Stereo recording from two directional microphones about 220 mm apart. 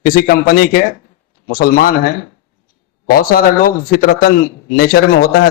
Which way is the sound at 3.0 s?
40° left (ahead or behind).